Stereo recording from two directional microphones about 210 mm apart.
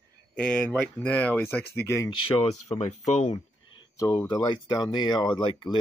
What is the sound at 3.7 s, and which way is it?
Speech, 20° left (ahead or behind).